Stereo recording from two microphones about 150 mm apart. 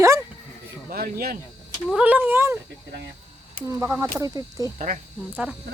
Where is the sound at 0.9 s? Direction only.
85° right.